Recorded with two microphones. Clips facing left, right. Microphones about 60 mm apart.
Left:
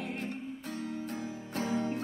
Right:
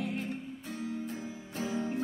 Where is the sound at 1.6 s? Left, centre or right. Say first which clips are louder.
Left 1 dB; left.